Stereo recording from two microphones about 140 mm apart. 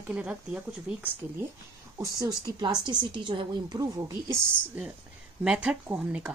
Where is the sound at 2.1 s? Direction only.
25° right (ahead or behind).